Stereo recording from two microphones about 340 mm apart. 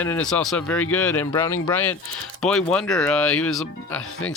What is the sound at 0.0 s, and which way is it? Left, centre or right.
Speech, centre.